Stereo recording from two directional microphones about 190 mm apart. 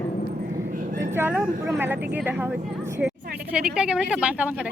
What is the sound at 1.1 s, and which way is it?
A woman's voice, 10° right (ahead or behind).